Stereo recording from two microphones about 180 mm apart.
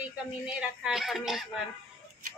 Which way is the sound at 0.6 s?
Centre (ahead or behind).